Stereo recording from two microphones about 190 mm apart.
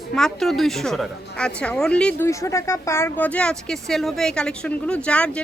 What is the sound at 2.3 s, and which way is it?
Speech, 15° left (ahead or behind).